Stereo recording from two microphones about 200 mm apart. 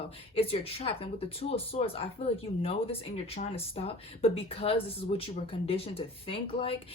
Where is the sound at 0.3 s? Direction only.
30° left (ahead or behind).